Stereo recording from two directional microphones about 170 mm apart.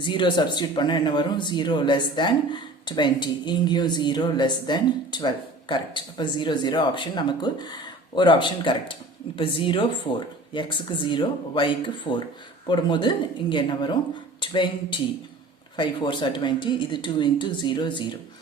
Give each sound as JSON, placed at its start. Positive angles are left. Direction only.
{"t": 0.0, "sound": "speech", "side_deg": 30}